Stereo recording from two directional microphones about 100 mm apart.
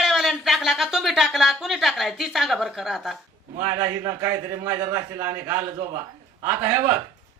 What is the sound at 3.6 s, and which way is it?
A man's voice, 35° right (ahead or behind).